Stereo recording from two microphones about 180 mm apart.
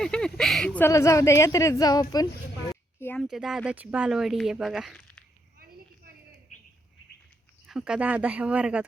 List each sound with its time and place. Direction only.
0.0 s speech: 5° left (ahead or behind); by 2.2 s 20° left (ahead or behind)
3.0 s a sound: 10° left (ahead or behind)
3.2 s speech: centre (ahead or behind)
7.7 s speech: 5° right (ahead or behind)